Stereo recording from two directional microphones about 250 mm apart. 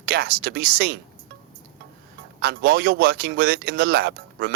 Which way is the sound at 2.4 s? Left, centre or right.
Right.